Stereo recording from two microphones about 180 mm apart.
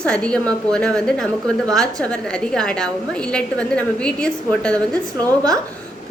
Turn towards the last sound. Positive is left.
turn(degrees=-20)  # may be behind; listen again after turning